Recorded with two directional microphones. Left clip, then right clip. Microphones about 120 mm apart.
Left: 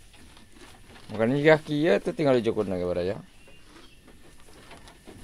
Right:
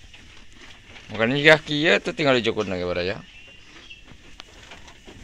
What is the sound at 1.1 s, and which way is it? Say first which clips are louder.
Speech: right 4 dB; 30° left (ahead or behind).